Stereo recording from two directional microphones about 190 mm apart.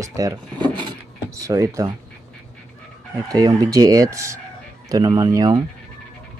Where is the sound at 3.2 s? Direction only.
20° right (ahead or behind).